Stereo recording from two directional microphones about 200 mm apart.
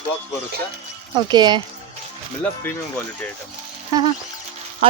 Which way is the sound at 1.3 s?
20° right (ahead or behind).